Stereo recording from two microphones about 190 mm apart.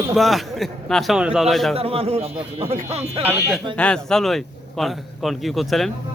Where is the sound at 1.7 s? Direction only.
30° right (ahead or behind).